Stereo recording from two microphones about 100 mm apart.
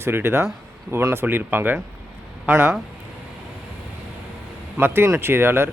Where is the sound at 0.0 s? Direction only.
25° right (ahead or behind).